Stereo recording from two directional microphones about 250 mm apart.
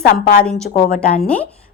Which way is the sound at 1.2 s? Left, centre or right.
Centre.